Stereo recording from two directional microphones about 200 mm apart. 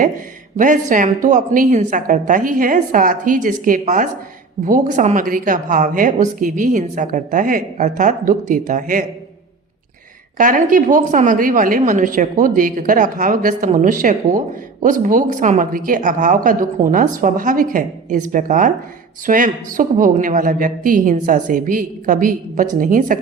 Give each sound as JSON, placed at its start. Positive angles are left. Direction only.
{"t": 0.5, "sound": "a woman's voice", "side_deg": -40}
{"t": 10.3, "sound": "a woman's voice", "side_deg": -40}